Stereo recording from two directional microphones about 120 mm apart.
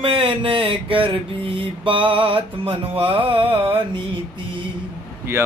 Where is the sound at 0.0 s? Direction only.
50° right (ahead or behind).